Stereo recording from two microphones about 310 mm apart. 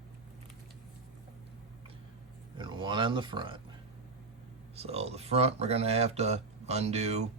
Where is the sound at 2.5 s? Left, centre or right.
Centre.